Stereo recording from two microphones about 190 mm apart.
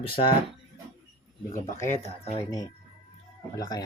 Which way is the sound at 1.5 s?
40° left (ahead or behind).